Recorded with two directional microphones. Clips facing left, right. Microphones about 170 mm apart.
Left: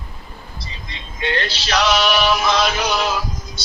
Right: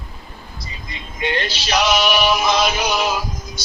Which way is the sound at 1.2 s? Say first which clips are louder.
Even; 15° right (ahead or behind).